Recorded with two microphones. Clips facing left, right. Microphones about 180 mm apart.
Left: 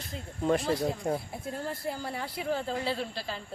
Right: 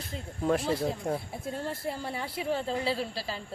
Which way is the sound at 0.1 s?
Centre (ahead or behind).